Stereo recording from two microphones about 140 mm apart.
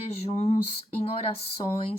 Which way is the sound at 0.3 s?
50° left (ahead or behind).